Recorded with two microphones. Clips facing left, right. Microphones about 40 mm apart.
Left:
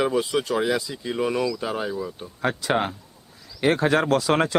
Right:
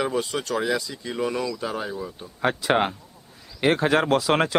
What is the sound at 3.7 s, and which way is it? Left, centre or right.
Speech, centre.